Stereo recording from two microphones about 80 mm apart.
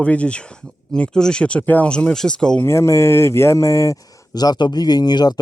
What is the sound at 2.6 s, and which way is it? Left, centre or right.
Speech, left.